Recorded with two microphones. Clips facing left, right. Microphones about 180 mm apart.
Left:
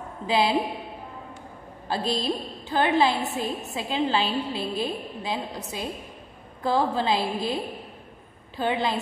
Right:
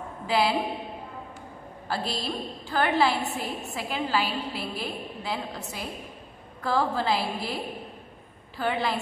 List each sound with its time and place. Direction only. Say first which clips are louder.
0.3 s a woman's voice: left 2 dB; 20° left (ahead or behind)
1.9 s a woman's voice: left 4 dB; 20° left (ahead or behind)